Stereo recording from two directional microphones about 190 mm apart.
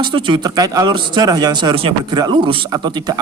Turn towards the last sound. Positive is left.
turn(degrees=-20)  # may be behind; listen again after turning